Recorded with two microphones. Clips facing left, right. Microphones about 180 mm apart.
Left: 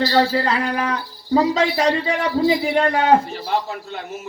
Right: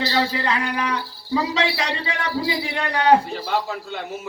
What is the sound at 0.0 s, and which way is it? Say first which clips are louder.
A man's voice: left 5 dB; 40° left (ahead or behind).